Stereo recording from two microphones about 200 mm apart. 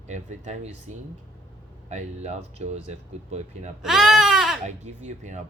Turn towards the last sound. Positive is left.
turn(degrees=-35)  # may be behind; listen again after turning